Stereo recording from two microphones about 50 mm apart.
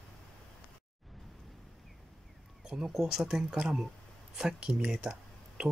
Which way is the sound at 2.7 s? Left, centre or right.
Centre.